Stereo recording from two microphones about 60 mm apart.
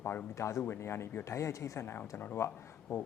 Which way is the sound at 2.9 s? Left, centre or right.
Left.